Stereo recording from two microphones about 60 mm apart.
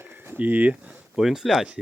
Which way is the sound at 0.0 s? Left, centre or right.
Right.